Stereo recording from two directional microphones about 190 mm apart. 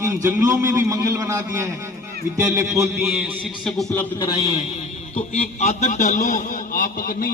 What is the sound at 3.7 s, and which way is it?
Speech, centre (ahead or behind).